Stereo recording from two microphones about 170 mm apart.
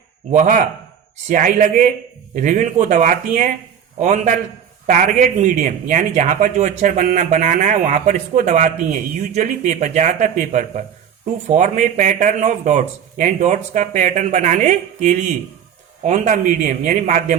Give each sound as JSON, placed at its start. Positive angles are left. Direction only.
{"t": 0.3, "sound": "speech", "side_deg": -45}